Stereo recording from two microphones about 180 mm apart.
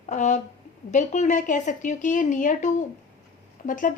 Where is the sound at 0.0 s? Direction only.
40° left (ahead or behind).